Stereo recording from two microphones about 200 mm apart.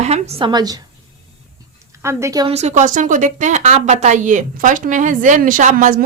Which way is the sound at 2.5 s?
35° right (ahead or behind).